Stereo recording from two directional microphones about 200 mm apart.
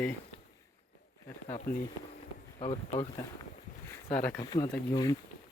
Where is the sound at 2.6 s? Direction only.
35° left (ahead or behind).